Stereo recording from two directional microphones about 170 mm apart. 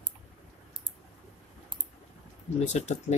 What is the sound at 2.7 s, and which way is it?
Speech, 40° left (ahead or behind).